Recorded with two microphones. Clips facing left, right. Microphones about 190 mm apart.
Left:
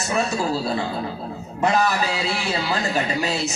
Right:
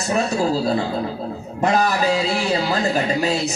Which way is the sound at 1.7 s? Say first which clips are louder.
Right 6 dB; 40° right (ahead or behind).